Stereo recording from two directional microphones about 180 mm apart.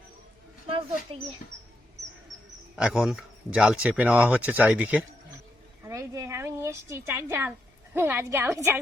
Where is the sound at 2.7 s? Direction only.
5° right (ahead or behind).